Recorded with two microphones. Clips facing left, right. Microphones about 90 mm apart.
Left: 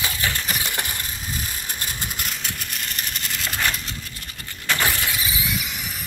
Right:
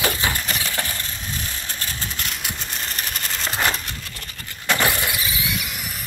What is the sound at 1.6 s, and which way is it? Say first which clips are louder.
Vehicle: even; 10° left (ahead or behind).